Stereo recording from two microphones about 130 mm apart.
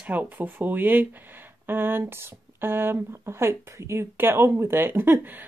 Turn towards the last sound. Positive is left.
turn(degrees=-15)  # may be behind; listen again after turning